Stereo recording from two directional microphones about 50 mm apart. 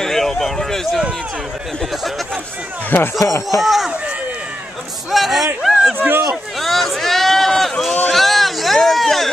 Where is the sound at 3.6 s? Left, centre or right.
Centre.